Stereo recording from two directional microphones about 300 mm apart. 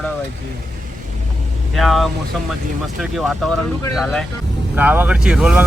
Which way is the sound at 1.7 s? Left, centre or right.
Centre.